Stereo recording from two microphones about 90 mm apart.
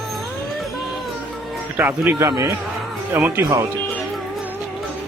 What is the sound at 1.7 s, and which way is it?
Speech, 20° right (ahead or behind).